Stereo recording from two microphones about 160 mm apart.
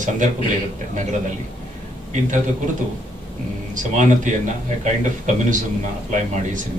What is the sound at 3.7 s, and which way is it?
Speech, 50° right (ahead or behind).